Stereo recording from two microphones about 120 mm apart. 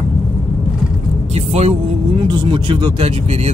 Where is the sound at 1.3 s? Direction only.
60° right (ahead or behind).